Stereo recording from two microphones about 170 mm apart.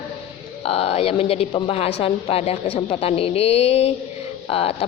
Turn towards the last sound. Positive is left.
turn(degrees=35)  # may be behind; listen again after turning